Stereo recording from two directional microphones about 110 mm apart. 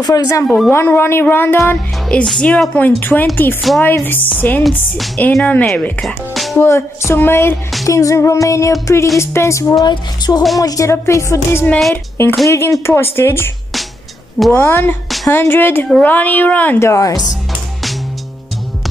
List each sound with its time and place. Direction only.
0.0 s speech: 30° left (ahead or behind)
0.7 s music: 20° left (ahead or behind)
1.7 s a woman's voice: 10° left (ahead or behind)
4.9 s speech: centre (ahead or behind)
5.4 s a woman's voice: 15° left (ahead or behind)
7.1 s music: 20° left (ahead or behind)
9.7 s speech: 40° left (ahead or behind)
10.6 s music: 30° left (ahead or behind)
14.5 s music: 20° left (ahead or behind)
15.9 s a woman's voice: 15° left (ahead or behind)
16.8 s music: 30° left (ahead or behind)